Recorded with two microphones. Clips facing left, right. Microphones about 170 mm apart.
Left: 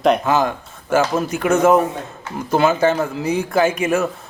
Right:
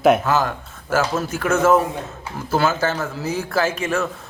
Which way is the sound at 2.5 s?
Centre (ahead or behind).